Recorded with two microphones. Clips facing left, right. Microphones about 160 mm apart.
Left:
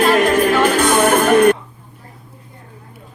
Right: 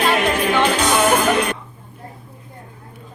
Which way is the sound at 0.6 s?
50° left (ahead or behind).